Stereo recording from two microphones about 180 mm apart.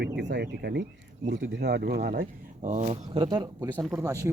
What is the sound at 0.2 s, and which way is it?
Speech, 70° right (ahead or behind).